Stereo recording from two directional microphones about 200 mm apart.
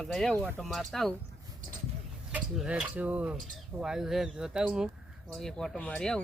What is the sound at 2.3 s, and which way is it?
Speech, 5° right (ahead or behind).